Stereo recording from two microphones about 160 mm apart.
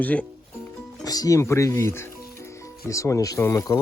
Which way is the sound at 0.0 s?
10° left (ahead or behind).